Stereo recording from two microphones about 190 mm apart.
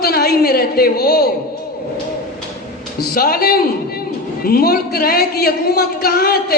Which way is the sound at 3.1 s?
50° left (ahead or behind).